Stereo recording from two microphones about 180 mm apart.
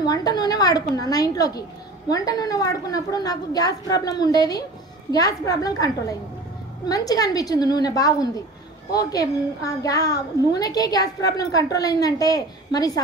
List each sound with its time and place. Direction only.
0.0 s a woman's voice: 20° left (ahead or behind)
6.9 s a woman's voice: 20° left (ahead or behind)